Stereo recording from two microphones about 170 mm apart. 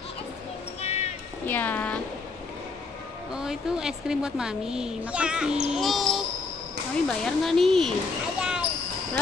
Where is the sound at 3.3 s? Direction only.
5° right (ahead or behind).